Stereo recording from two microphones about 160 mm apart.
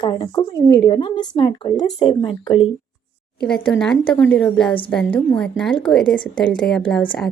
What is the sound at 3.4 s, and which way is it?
A woman's voice, 5° left (ahead or behind).